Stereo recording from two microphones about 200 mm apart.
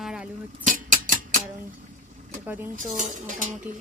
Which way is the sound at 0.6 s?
40° right (ahead or behind).